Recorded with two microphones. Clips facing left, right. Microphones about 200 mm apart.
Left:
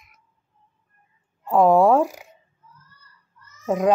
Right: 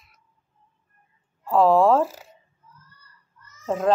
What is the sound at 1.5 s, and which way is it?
Speech, 15° left (ahead or behind).